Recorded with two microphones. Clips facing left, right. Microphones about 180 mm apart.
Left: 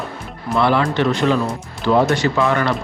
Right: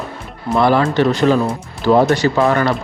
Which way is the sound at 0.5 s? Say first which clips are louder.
Right 3 dB; 40° right (ahead or behind).